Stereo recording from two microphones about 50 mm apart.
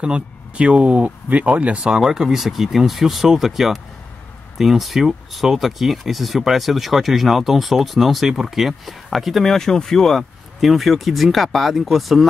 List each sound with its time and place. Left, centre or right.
0.0 s speech: right
2.0 s speech: centre